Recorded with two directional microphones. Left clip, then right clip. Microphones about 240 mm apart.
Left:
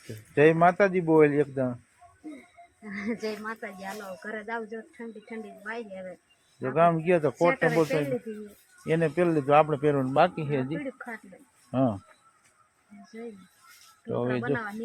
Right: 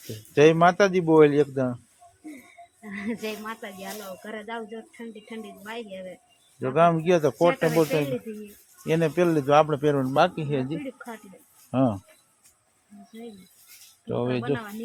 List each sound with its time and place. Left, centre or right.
0.3 s speech: centre
2.8 s speech: centre
10.9 s speech: centre
11.7 s speech: centre
14.1 s speech: centre